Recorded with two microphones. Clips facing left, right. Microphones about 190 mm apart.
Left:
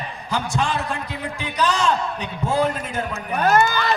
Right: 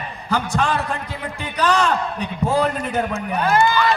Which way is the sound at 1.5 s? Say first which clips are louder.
Right 3 dB; 60° right (ahead or behind).